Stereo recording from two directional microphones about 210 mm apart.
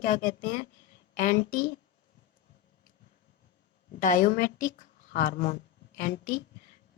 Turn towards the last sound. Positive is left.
turn(degrees=35)  # may be behind; listen again after turning